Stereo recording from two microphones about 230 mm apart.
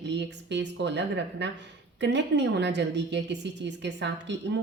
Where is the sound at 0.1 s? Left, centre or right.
Right.